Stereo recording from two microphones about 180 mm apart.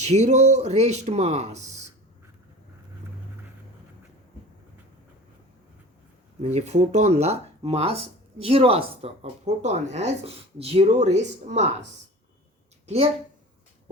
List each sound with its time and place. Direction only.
0.0 s speech: 40° right (ahead or behind)
6.4 s speech: 40° right (ahead or behind)